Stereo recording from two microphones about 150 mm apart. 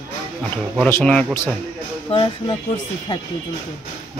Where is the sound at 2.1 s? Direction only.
35° left (ahead or behind).